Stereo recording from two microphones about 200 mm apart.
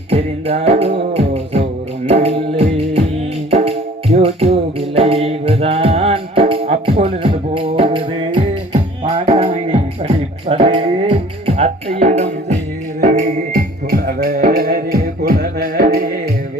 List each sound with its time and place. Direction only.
0.1 s music: 30° right (ahead or behind)
13.9 s music: 50° right (ahead or behind)